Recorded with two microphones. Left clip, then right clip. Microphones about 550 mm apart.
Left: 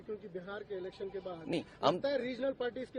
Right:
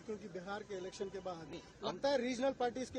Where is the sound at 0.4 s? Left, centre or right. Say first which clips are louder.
Even; centre.